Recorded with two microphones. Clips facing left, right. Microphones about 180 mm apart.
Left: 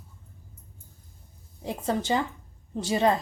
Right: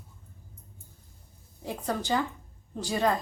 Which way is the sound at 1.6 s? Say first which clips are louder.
Left 3 dB; 20° left (ahead or behind).